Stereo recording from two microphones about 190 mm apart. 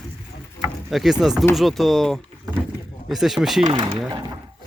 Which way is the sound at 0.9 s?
Centre (ahead or behind).